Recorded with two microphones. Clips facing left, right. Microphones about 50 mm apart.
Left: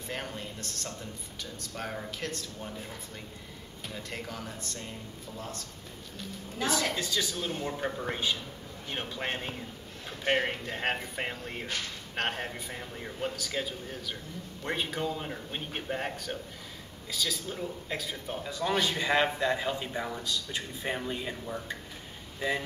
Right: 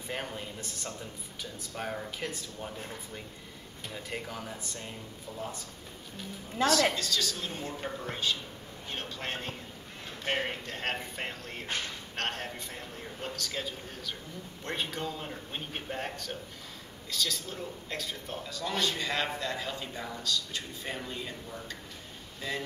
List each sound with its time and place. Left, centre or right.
0.1 s speech: centre
3.8 s speech: centre
7.0 s a man's voice: centre
8.1 s a man's voice: centre
18.4 s a man's voice: centre